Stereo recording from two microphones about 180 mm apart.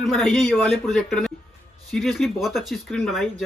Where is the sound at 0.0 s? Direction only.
Centre (ahead or behind).